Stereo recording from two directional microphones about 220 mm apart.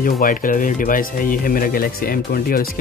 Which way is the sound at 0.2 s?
40° left (ahead or behind).